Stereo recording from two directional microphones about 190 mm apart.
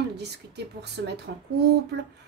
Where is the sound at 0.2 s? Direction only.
60° right (ahead or behind).